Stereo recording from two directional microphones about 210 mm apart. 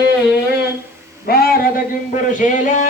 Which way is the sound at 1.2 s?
45° left (ahead or behind).